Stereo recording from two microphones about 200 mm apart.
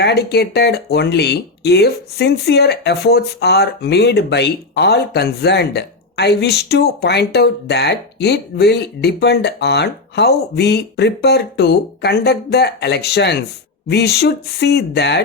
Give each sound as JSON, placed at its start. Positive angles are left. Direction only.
{"t": 0.0, "sound": "speech", "side_deg": 55}